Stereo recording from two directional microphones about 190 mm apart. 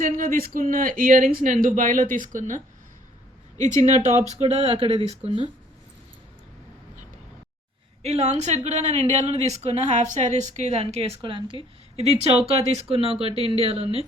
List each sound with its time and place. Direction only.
0.0 s speech: 45° right (ahead or behind)
3.8 s a woman's voice: 35° right (ahead or behind)
8.0 s a woman's voice: 35° right (ahead or behind)